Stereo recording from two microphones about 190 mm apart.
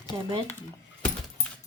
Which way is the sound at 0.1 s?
25° right (ahead or behind).